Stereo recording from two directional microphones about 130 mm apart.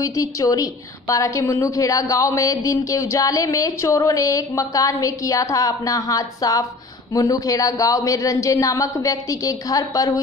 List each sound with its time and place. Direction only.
0.0 s a woman's voice: 25° left (ahead or behind)